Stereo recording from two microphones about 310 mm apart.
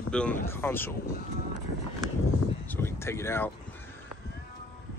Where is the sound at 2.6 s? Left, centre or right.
Centre.